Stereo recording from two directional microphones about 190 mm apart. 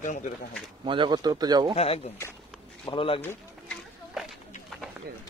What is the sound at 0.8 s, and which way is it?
Speech, 25° right (ahead or behind).